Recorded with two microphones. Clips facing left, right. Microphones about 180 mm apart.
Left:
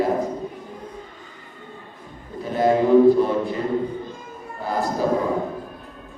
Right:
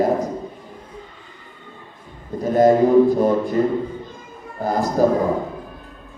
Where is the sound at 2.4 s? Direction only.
40° right (ahead or behind).